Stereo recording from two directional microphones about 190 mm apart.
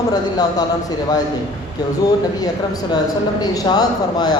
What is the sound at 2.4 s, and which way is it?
Speech, 20° left (ahead or behind).